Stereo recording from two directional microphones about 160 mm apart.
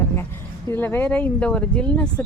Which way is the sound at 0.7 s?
15° left (ahead or behind).